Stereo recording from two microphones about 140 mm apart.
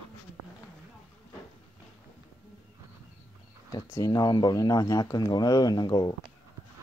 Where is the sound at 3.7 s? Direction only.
25° left (ahead or behind).